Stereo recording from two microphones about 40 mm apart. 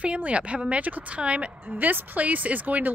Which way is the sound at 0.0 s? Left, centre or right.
Right.